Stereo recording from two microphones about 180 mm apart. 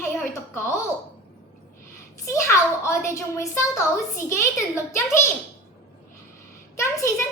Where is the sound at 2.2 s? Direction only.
15° left (ahead or behind).